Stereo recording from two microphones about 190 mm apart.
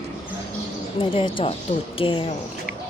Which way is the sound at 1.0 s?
30° left (ahead or behind).